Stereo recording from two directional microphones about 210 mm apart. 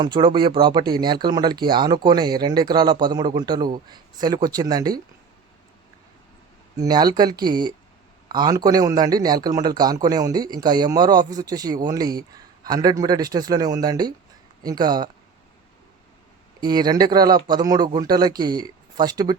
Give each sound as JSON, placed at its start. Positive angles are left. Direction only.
{"t": 0.0, "sound": "speech", "side_deg": -20}
{"t": 6.7, "sound": "speech", "side_deg": -20}
{"t": 16.6, "sound": "speech", "side_deg": -20}